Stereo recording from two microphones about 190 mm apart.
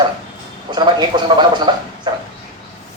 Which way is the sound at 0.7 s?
25° right (ahead or behind).